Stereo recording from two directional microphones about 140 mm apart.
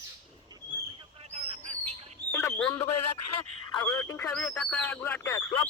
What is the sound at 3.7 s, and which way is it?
Speech, 30° left (ahead or behind).